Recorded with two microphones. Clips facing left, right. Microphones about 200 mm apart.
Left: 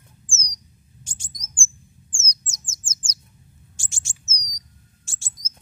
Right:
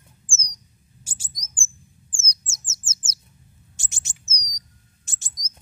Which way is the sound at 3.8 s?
20° right (ahead or behind).